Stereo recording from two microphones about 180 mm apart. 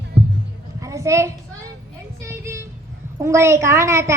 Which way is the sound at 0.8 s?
15° right (ahead or behind).